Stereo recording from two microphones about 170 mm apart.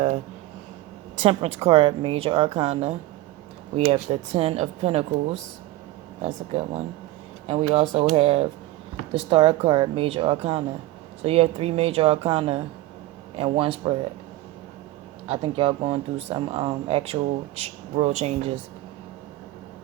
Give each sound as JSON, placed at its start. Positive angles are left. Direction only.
{"t": 1.2, "sound": "speech", "side_deg": -35}
{"t": 15.3, "sound": "speech", "side_deg": -35}